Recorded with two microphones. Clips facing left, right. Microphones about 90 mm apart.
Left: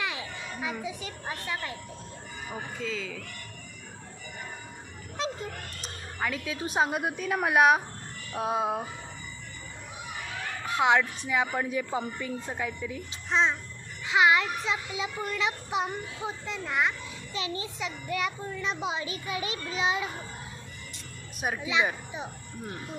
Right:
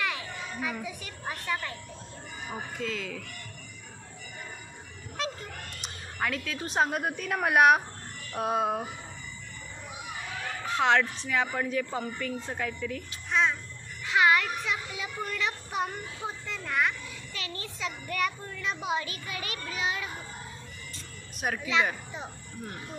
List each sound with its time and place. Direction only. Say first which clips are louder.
0.0 s children playing: right 1 dB; 20° left (ahead or behind)
0.7 s a woman's voice: left 2 dB; 15° left (ahead or behind)
2.8 s a woman's voice: even; centre (ahead or behind)
6.1 s a woman's voice: even; 5° left (ahead or behind)
10.6 s a sound: left 1 dB; 5° left (ahead or behind)
11.2 s a woman's voice: left 1 dB; 10° left (ahead or behind)
13.3 s babbling: left 1 dB; 25° left (ahead or behind)
14.0 s speech: left 1 dB; 20° left (ahead or behind)
21.5 s a woman's voice: even; 15° left (ahead or behind)